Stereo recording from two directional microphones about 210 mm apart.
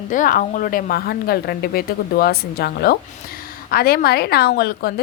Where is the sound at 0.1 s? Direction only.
40° left (ahead or behind).